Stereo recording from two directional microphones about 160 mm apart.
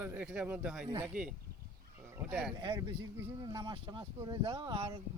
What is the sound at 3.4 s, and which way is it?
Speech, 25° right (ahead or behind).